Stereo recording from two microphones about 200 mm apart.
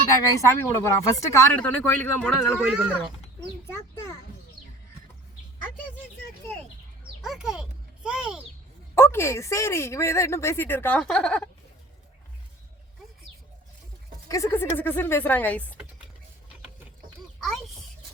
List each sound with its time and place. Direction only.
0.2 s speech: 15° left (ahead or behind)
2.6 s speech: centre (ahead or behind)
7.2 s a child's voice: centre (ahead or behind)
9.0 s speech: 15° left (ahead or behind)
14.3 s speech: 15° left (ahead or behind)